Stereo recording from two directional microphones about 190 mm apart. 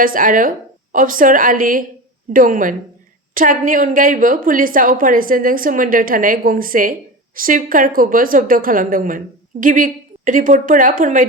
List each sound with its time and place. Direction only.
0.0 s a woman's voice: 45° right (ahead or behind)